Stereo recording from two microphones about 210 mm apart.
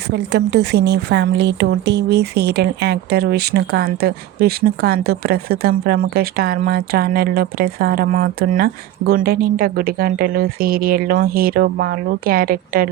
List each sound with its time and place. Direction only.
0.1 s speech: 55° right (ahead or behind)